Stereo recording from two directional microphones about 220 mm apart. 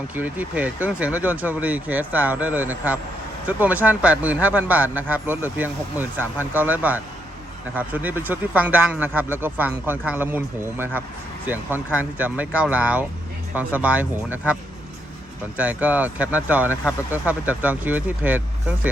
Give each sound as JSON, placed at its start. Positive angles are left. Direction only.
{"t": 0.2, "sound": "speech", "side_deg": -5}